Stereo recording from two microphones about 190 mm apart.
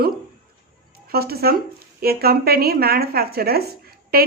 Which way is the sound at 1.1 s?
55° right (ahead or behind).